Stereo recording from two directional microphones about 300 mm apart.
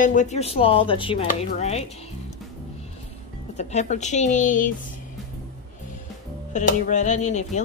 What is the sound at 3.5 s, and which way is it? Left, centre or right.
Speech, left.